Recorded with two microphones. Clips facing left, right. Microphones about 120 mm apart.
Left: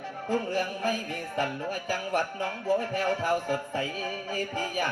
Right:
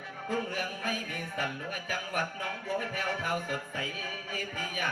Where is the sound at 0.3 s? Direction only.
35° left (ahead or behind).